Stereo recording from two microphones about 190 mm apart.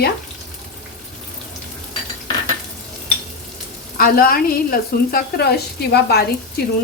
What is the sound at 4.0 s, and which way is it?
A woman's voice, 50° left (ahead or behind).